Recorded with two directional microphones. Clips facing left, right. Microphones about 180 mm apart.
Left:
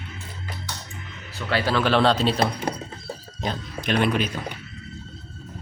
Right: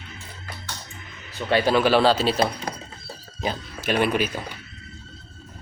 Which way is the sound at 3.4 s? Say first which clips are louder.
Right 1 dB; 5° right (ahead or behind).